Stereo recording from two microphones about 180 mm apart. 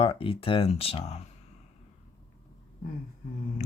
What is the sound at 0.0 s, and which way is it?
Speech, 30° left (ahead or behind).